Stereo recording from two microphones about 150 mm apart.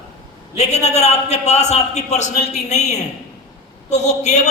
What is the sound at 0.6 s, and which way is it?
A man's voice, 50° left (ahead or behind).